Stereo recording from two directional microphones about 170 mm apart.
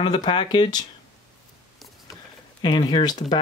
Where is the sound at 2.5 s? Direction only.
25° left (ahead or behind).